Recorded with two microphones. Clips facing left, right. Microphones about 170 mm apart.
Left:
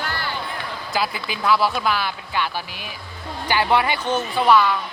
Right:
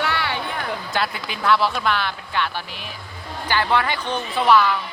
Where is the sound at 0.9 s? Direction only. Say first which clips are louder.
Left 5 dB; centre (ahead or behind).